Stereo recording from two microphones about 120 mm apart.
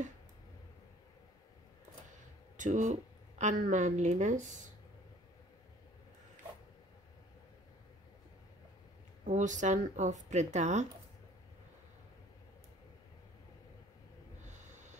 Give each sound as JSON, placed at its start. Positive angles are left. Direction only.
{"t": 2.5, "sound": "a woman's voice", "side_deg": -90}
{"t": 9.2, "sound": "speech", "side_deg": -90}
{"t": 14.5, "sound": "snort", "side_deg": -80}